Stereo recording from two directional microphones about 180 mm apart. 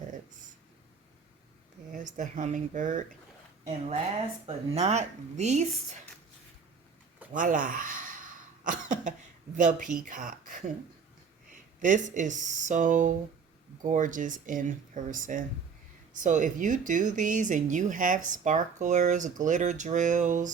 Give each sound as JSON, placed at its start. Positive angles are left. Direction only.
{"t": 1.9, "sound": "speech", "side_deg": -45}
{"t": 4.4, "sound": "speech", "side_deg": -35}
{"t": 7.3, "sound": "cough", "side_deg": -45}
{"t": 9.6, "sound": "speech", "side_deg": -45}